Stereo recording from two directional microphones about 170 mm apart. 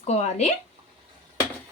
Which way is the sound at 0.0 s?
40° left (ahead or behind).